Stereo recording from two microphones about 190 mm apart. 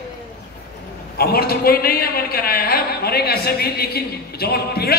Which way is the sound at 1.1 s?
55° left (ahead or behind).